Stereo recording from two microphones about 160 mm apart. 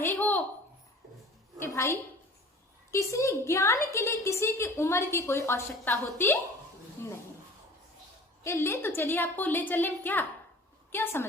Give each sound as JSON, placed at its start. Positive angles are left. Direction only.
{"t": 0.0, "sound": "a sound", "side_deg": 10}
{"t": 1.6, "sound": "a woman's voice", "side_deg": 15}
{"t": 8.4, "sound": "a woman's voice", "side_deg": 15}